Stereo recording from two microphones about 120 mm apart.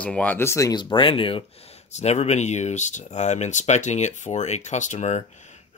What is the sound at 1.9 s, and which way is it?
Speech, 70° left (ahead or behind).